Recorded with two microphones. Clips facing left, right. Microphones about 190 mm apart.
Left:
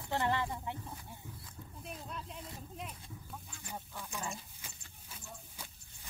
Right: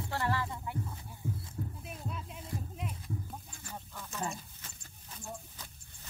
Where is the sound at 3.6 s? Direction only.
10° left (ahead or behind).